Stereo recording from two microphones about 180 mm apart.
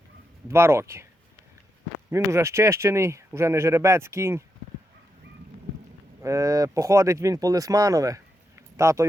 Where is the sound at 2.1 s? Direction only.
15° right (ahead or behind).